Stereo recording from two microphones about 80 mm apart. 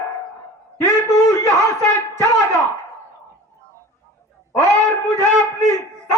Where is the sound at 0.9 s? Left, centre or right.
Left.